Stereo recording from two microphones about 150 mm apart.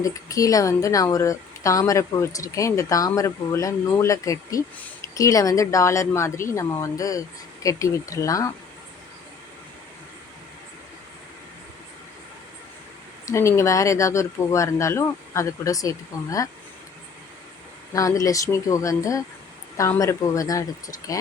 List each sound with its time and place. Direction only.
0.0 s a woman's voice: 20° left (ahead or behind)
13.2 s a woman's voice: 20° left (ahead or behind)
17.9 s a woman's voice: 20° left (ahead or behind)